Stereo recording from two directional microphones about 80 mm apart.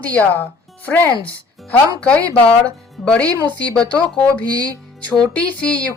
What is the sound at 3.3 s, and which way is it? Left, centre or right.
Speech, right.